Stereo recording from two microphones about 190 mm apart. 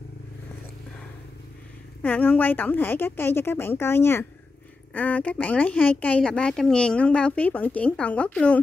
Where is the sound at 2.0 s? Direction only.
10° left (ahead or behind).